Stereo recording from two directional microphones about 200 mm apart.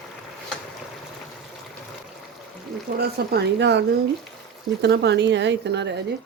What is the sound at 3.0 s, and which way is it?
Speech, 55° right (ahead or behind).